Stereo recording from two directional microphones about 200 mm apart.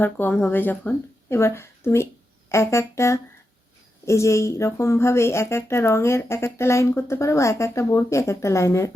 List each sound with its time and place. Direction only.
0.0 s speech: 10° left (ahead or behind)